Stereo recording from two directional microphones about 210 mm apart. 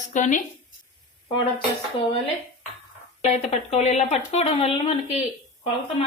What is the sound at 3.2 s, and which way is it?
Speech, 30° left (ahead or behind).